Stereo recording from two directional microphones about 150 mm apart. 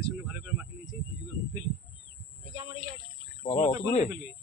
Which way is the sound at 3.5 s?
50° left (ahead or behind).